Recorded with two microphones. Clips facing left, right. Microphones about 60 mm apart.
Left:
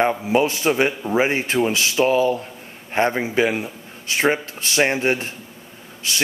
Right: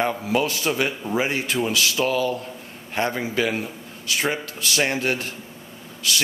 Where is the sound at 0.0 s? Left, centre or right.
Left.